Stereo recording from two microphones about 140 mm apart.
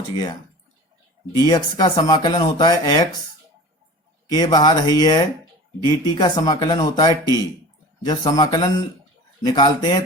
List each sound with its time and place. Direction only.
1.5 s speech: 30° left (ahead or behind)
4.3 s speech: 30° left (ahead or behind)